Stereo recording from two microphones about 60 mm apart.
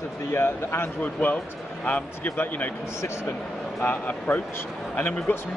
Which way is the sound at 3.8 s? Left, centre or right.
Left.